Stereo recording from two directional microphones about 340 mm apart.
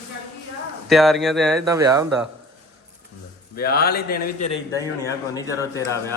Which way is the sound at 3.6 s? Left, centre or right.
Left.